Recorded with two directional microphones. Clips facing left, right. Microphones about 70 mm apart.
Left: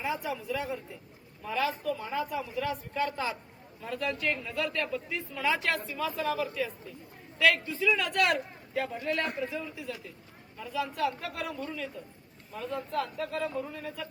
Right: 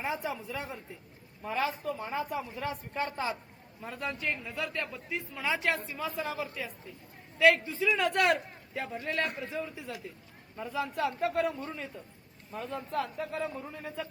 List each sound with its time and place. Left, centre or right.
0.0 s a man's voice: right